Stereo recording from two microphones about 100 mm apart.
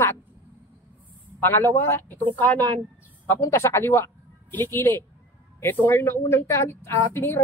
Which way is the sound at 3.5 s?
25° left (ahead or behind).